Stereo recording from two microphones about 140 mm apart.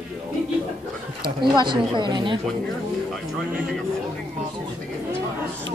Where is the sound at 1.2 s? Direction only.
35° right (ahead or behind).